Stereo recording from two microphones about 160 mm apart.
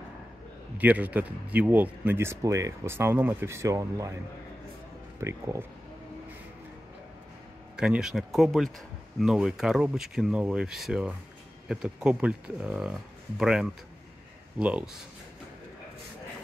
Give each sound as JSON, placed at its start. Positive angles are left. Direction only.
{"t": 0.7, "sound": "speech", "side_deg": -10}
{"t": 5.2, "sound": "speech", "side_deg": -15}
{"t": 7.7, "sound": "speech", "side_deg": -5}